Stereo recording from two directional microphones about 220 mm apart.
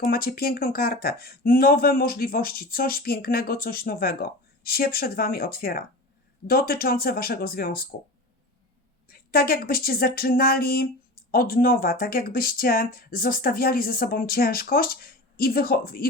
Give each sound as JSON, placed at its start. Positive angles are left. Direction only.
{"t": 0.0, "sound": "speech", "side_deg": 40}
{"t": 9.0, "sound": "speech", "side_deg": 45}